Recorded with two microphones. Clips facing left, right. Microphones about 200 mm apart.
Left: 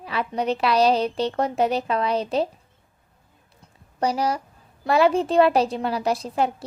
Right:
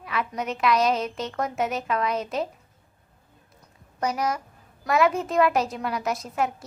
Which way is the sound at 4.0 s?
30° left (ahead or behind).